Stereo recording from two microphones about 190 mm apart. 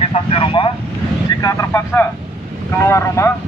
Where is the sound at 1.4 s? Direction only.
15° left (ahead or behind).